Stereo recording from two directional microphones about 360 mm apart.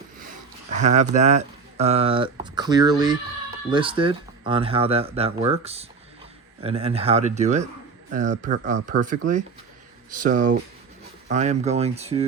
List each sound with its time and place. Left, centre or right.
0.2 s speech: right